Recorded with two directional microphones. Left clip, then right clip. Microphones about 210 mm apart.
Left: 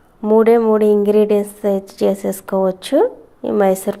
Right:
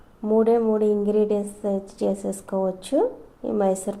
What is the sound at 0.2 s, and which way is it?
A woman's voice, 25° left (ahead or behind).